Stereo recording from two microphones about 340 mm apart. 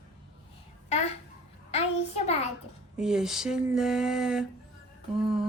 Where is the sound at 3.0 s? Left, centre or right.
Centre.